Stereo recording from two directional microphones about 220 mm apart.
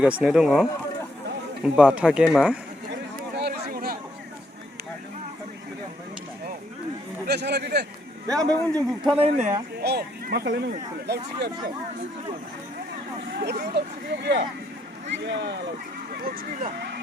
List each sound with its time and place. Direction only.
0.0 s speech: 5° right (ahead or behind)
2.9 s a sound: 50° right (ahead or behind)
7.3 s a sound: 50° right (ahead or behind)
8.4 s speech: 15° right (ahead or behind)
9.1 s speech: 30° right (ahead or behind)
9.8 s speech: 45° right (ahead or behind)
13.4 s speech: 50° right (ahead or behind)
16.1 s speech: 40° right (ahead or behind)